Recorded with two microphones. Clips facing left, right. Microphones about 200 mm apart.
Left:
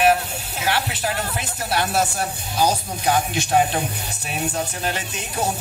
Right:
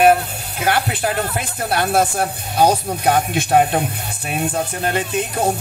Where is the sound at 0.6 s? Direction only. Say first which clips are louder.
Right 5 dB; 50° right (ahead or behind).